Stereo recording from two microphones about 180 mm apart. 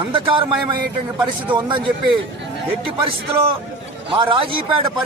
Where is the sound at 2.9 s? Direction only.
30° right (ahead or behind).